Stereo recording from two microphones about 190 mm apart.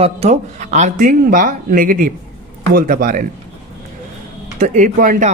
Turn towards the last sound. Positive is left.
turn(degrees=-40)  # may be behind; listen again after turning